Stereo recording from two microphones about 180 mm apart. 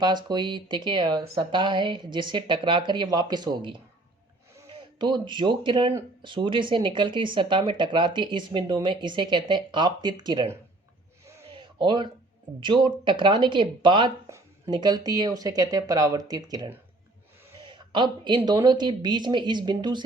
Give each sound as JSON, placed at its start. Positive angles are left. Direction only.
{"t": 0.0, "sound": "speech", "side_deg": -25}
{"t": 4.8, "sound": "speech", "side_deg": -25}
{"t": 11.5, "sound": "a sound", "side_deg": -25}
{"t": 12.5, "sound": "speech", "side_deg": -25}